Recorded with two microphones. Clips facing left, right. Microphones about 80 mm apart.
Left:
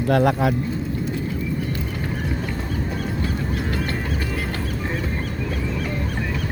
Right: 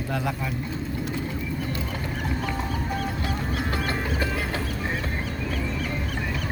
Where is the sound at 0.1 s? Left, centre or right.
Left.